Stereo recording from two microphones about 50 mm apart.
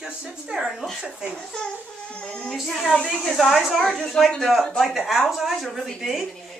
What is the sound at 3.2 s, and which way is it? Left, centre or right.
Speech, centre.